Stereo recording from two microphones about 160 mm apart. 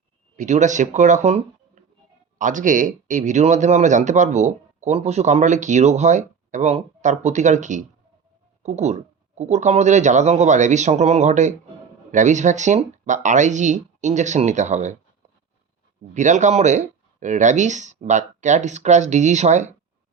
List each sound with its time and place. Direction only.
0.3 s speech: 50° right (ahead or behind)
16.1 s speech: 50° right (ahead or behind)